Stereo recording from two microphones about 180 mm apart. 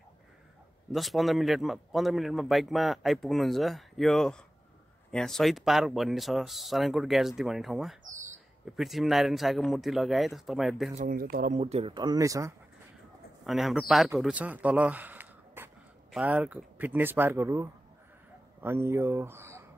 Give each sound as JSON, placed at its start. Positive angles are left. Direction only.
{"t": 0.9, "sound": "a man's voice", "side_deg": 0}
{"t": 8.1, "sound": "a sound", "side_deg": -45}
{"t": 8.7, "sound": "a man's voice", "side_deg": 0}
{"t": 11.0, "sound": "speech", "side_deg": -55}
{"t": 11.5, "sound": "speech", "side_deg": -35}
{"t": 13.5, "sound": "speech", "side_deg": 0}